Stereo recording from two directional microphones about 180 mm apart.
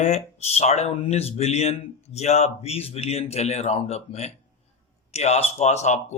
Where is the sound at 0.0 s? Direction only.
35° left (ahead or behind).